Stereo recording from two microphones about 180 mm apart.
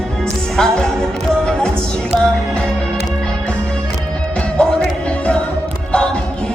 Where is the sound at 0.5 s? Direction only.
5° left (ahead or behind).